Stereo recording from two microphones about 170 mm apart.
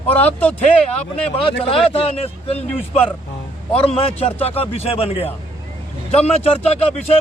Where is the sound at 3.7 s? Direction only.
35° left (ahead or behind).